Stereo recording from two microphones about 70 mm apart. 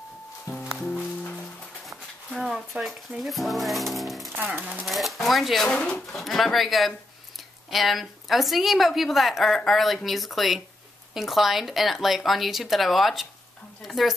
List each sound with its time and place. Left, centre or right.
0.7 s music: left
1.9 s speech: centre
4.6 s speech: right
4.8 s a woman's voice: centre
5.7 s a woman's voice: centre